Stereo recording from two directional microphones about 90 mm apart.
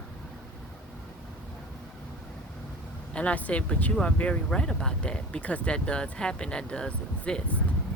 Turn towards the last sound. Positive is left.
turn(degrees=15)  # may be behind; listen again after turning